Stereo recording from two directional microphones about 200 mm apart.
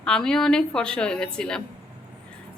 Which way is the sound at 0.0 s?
5° left (ahead or behind).